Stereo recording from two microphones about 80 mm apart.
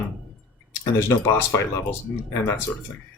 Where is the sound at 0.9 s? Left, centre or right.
Left.